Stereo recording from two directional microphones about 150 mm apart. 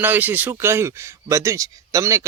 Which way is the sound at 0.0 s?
15° right (ahead or behind).